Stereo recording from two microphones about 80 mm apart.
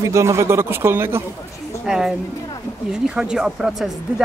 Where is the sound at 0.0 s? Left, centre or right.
Right.